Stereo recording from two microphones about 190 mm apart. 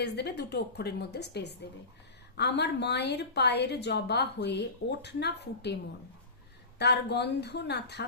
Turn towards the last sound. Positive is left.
turn(degrees=60)  # may be behind; listen again after turning